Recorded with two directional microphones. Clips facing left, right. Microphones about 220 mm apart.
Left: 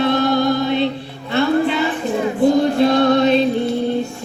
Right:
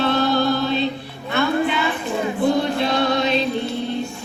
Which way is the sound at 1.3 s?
35° left (ahead or behind).